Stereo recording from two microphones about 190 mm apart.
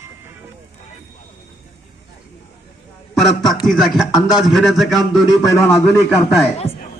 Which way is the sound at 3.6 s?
Centre (ahead or behind).